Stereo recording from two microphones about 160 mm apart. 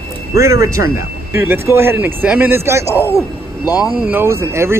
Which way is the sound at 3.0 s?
20° left (ahead or behind).